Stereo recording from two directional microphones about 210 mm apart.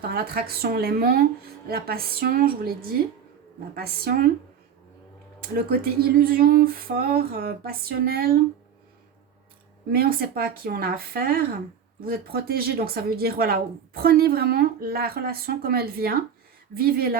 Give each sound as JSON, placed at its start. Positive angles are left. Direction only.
{"t": 0.0, "sound": "a woman's voice", "side_deg": -45}
{"t": 5.4, "sound": "a woman's voice", "side_deg": -45}
{"t": 9.9, "sound": "a woman's voice", "side_deg": -45}